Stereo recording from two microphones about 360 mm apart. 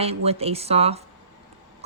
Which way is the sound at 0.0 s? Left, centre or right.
Centre.